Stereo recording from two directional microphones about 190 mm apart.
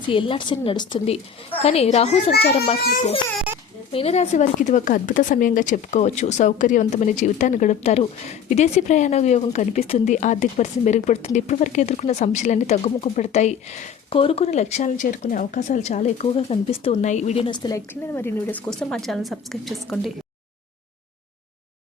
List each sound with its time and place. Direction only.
0.1 s a woman's voice: 25° left (ahead or behind)
2.8 s a child's voice: 50° left (ahead or behind)
3.9 s a woman's voice: 35° left (ahead or behind); by 20.1 s centre (ahead or behind)